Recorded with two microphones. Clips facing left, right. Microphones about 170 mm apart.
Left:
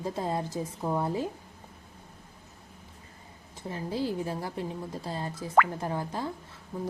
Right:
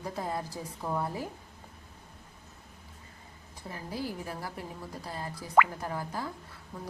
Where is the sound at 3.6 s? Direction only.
25° left (ahead or behind).